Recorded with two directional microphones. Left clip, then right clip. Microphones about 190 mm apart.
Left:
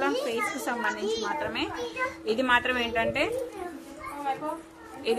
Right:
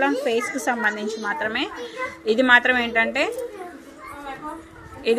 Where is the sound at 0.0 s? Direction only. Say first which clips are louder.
Right 6 dB; 25° right (ahead or behind).